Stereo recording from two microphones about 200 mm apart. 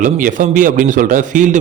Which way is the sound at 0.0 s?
40° right (ahead or behind).